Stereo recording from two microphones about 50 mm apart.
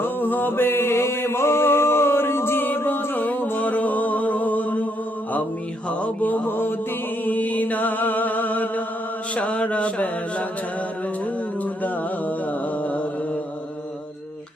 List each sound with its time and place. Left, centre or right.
0.0 s music: left
6.0 s mantra: left
7.3 s music: left
9.3 s mantra: left